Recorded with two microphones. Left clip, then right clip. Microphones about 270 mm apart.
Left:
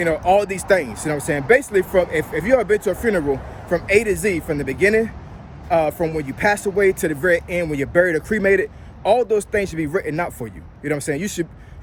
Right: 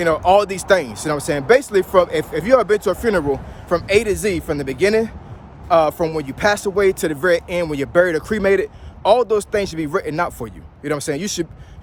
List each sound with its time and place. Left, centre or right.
0.0 s speech: centre